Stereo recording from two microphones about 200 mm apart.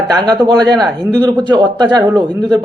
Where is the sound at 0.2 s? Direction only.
20° right (ahead or behind).